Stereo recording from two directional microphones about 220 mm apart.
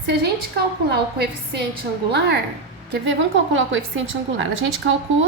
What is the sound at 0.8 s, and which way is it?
Speech, 50° right (ahead or behind).